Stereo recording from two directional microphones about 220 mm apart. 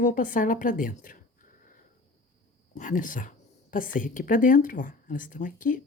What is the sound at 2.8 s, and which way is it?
A woman's voice, 35° left (ahead or behind).